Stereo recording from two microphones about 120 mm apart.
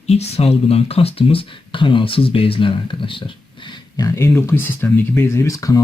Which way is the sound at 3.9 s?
25° left (ahead or behind).